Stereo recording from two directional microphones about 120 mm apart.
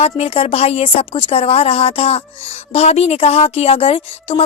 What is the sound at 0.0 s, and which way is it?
A woman's voice, 60° left (ahead or behind).